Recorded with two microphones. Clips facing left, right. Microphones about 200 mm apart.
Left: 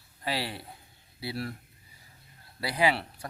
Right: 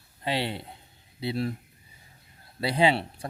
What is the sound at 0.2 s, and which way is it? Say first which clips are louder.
A man's voice: right 4 dB; 25° right (ahead or behind).